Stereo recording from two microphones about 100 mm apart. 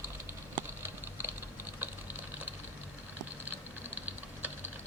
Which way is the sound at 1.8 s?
20° right (ahead or behind).